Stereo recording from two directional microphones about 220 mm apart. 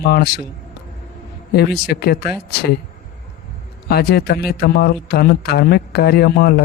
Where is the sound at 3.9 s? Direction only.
45° left (ahead or behind).